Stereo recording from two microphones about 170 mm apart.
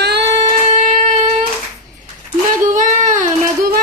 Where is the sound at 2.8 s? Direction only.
45° right (ahead or behind).